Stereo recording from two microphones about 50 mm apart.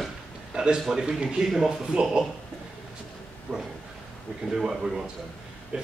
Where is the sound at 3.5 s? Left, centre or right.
Centre.